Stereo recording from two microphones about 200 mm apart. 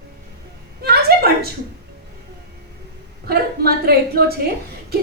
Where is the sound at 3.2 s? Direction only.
50° right (ahead or behind).